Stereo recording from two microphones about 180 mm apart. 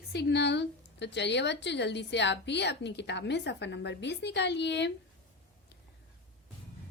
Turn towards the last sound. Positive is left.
turn(degrees=75)  # may be behind; listen again after turning